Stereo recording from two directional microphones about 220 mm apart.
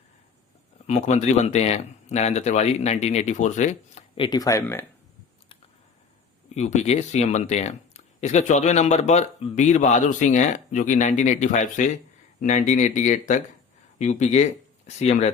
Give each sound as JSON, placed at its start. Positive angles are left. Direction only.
{"t": 0.9, "sound": "speech", "side_deg": 30}
{"t": 6.5, "sound": "speech", "side_deg": 30}